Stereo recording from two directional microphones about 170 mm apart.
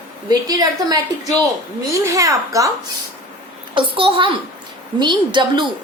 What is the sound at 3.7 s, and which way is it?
A child's voice, 30° right (ahead or behind).